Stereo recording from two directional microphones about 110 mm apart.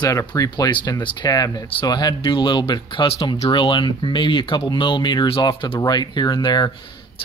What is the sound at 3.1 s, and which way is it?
Speech, 60° left (ahead or behind).